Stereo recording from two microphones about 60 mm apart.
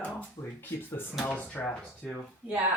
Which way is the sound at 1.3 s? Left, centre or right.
Left.